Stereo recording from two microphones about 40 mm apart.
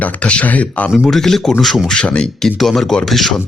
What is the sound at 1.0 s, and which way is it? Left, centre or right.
Speech, centre.